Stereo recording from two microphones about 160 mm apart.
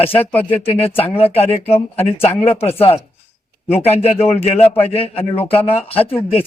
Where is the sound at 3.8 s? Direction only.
40° left (ahead or behind).